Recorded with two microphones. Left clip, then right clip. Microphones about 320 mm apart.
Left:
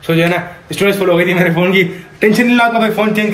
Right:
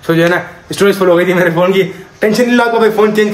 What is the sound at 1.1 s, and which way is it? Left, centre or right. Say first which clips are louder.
Speech: right 2 dB; right.